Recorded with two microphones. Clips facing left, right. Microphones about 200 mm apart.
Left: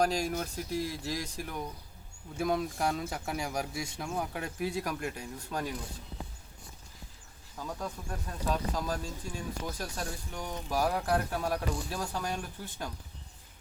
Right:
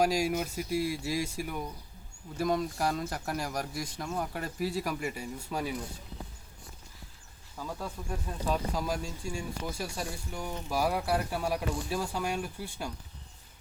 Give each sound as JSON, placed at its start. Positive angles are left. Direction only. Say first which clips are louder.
{"t": 0.0, "sound": "speech", "louder": "right 2 dB", "side_deg": -10}
{"t": 2.4, "sound": "speech", "louder": "right 1 dB", "side_deg": 0}
{"t": 7.6, "sound": "speech", "louder": "even", "side_deg": -5}